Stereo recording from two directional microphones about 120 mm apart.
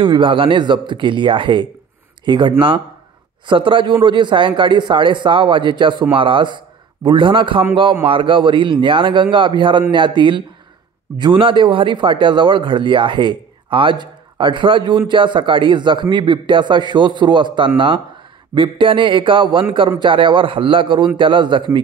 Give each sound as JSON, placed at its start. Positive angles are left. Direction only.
{"t": 0.0, "sound": "a man's voice", "side_deg": -45}